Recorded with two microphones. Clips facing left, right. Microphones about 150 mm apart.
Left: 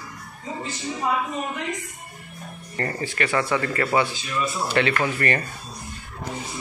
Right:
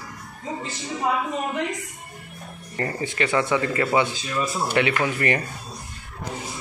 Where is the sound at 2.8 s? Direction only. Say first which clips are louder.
Right 1 dB; 15° right (ahead or behind).